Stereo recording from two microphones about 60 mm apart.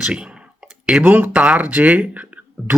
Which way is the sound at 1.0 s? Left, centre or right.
Right.